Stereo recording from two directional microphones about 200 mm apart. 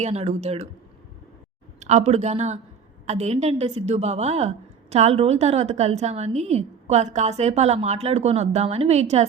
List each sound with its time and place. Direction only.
0.0 s a woman's voice: 35° right (ahead or behind)
1.8 s a woman's voice: 35° right (ahead or behind)